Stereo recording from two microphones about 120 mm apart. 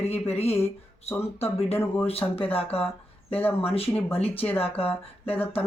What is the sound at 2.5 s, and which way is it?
Speech, 55° left (ahead or behind).